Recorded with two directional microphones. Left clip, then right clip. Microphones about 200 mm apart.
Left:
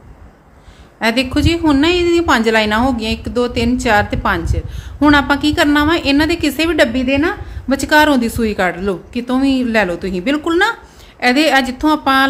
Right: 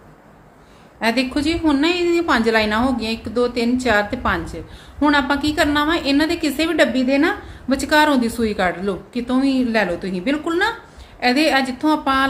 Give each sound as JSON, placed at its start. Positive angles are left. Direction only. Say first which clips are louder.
{"t": 0.9, "sound": "a woman's voice", "louder": "left 4 dB", "side_deg": 30}
{"t": 7.8, "sound": "a woman's voice", "louder": "left 4 dB", "side_deg": 30}